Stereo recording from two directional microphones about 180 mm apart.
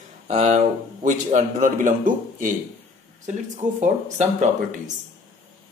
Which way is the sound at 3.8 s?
40° right (ahead or behind).